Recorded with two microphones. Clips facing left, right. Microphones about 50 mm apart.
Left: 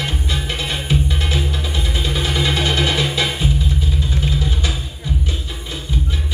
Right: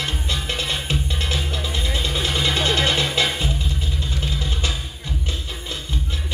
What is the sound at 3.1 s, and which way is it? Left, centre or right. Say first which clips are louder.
Music: left 1 dB; right.